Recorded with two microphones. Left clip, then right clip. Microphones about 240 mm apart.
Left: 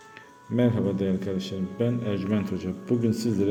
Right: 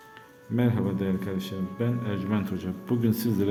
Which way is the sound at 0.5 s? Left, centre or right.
Centre.